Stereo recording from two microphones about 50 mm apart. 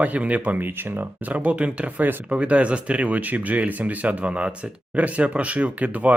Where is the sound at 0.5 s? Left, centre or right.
Right.